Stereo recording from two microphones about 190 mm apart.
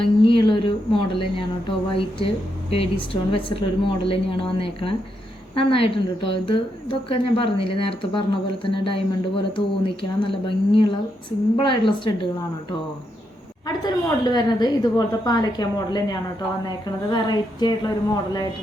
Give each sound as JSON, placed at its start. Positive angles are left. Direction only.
{"t": 0.0, "sound": "a sound", "side_deg": 25}
{"t": 2.0, "sound": "speech", "side_deg": 30}
{"t": 13.8, "sound": "speech", "side_deg": 20}